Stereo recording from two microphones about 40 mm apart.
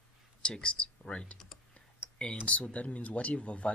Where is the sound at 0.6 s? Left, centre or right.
Left.